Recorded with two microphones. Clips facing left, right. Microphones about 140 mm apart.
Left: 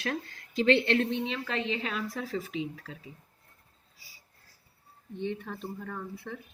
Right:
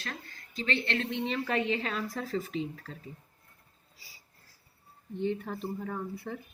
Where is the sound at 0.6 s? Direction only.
65° left (ahead or behind).